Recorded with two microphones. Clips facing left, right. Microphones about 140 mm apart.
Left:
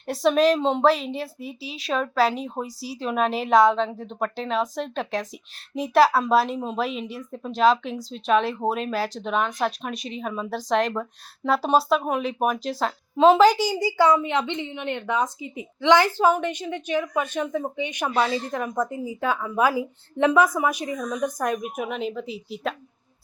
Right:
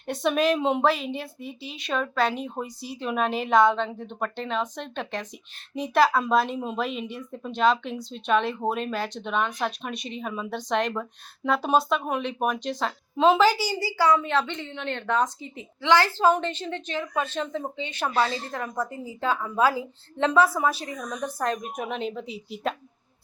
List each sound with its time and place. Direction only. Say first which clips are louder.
0.0 s a woman's voice: left 4 dB; centre (ahead or behind)
13.7 s a woman's voice: left 3 dB; 20° left (ahead or behind); by 22.7 s centre (ahead or behind)